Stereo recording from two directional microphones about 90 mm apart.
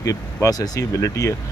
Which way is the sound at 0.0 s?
40° left (ahead or behind).